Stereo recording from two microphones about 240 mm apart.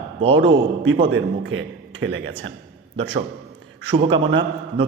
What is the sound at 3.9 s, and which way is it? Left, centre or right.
Speech, right.